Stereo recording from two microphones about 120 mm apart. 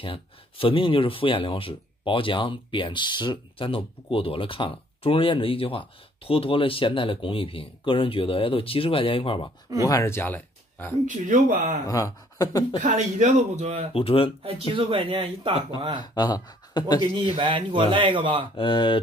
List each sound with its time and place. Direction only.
0.0 s speech: 50° left (ahead or behind)
9.8 s speech: 25° left (ahead or behind)
11.1 s speech: 90° right
11.8 s speech: 30° left (ahead or behind)
12.8 s speech: 80° right; by 13.8 s 65° right (ahead or behind)
13.9 s speech: 50° left (ahead or behind)
14.7 s speech: 45° right (ahead or behind)
16.0 s speech: 35° left (ahead or behind)
17.1 s speech: 45° right (ahead or behind)
18.6 s speech: 45° left (ahead or behind)